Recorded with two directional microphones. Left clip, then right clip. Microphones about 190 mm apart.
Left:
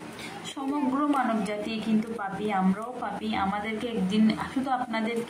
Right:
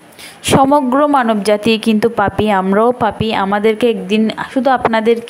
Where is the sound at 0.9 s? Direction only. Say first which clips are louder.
Right 14 dB; 50° right (ahead or behind).